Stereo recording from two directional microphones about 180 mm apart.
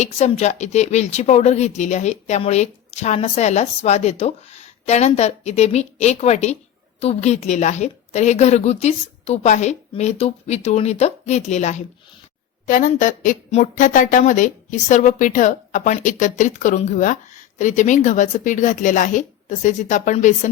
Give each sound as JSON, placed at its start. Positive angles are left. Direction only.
{"t": 0.0, "sound": "a woman's voice", "side_deg": 40}